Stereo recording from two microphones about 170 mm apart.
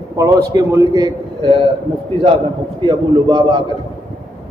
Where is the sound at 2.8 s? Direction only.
30° right (ahead or behind).